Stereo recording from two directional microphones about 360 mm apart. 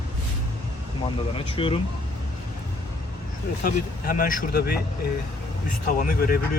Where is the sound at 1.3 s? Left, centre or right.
Centre.